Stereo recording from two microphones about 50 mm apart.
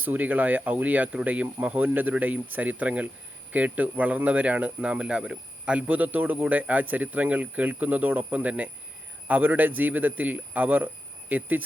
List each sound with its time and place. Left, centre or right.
0.0 s speech: right; by 5.7 s centre
5.7 s speech: right